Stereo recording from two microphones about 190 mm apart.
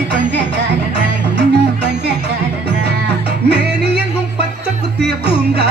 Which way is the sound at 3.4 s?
65° right (ahead or behind).